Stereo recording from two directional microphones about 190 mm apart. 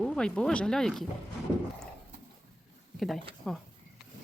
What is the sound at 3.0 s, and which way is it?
Speech, centre (ahead or behind).